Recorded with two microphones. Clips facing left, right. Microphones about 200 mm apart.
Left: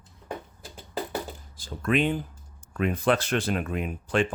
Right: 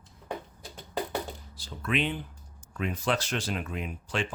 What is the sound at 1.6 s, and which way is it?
Speech, 50° left (ahead or behind).